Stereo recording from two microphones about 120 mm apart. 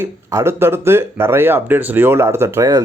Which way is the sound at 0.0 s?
25° right (ahead or behind).